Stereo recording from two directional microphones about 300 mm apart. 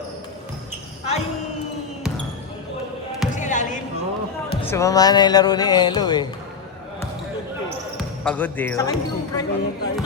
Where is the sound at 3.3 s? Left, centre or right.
Left.